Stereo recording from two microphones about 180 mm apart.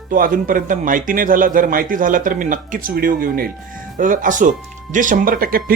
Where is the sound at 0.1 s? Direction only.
50° right (ahead or behind).